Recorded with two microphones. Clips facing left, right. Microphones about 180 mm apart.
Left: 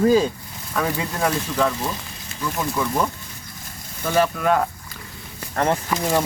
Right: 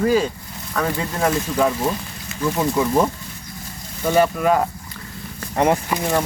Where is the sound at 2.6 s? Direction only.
20° right (ahead or behind).